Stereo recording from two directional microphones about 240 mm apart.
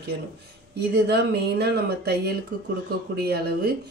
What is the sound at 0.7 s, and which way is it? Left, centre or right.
A woman's voice, right.